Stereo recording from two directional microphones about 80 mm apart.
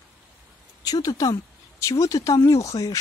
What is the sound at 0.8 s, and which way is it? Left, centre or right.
Speech, left.